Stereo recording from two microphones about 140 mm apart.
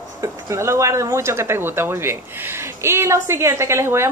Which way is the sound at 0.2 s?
20° right (ahead or behind).